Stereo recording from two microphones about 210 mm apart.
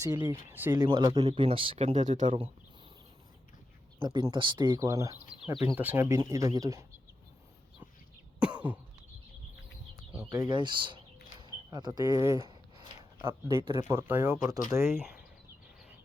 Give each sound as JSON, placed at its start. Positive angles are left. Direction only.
{"t": 0.0, "sound": "speech", "side_deg": -15}
{"t": 2.2, "sound": "speech", "side_deg": -25}
{"t": 4.0, "sound": "speech", "side_deg": -20}
{"t": 8.4, "sound": "cough", "side_deg": -5}
{"t": 10.2, "sound": "speech", "side_deg": -20}